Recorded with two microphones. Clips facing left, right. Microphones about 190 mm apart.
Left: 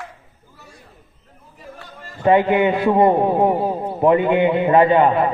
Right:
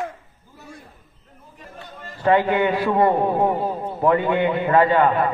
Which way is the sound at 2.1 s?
20° left (ahead or behind).